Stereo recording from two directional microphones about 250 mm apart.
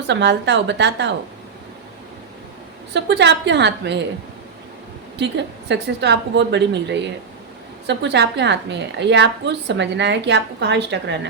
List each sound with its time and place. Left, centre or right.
0.1 s a woman's voice: right
2.9 s a woman's voice: right
5.1 s a woman's voice: right